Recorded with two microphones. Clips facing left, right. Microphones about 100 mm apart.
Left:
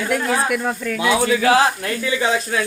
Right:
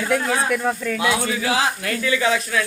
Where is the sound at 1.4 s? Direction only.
55° left (ahead or behind).